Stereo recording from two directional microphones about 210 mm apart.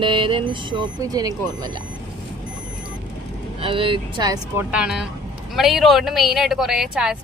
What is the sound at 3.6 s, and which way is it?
Speech, 25° right (ahead or behind).